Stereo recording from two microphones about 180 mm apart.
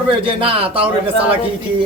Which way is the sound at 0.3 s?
30° right (ahead or behind).